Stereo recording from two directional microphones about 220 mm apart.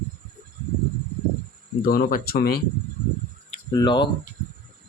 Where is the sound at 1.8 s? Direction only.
40° left (ahead or behind).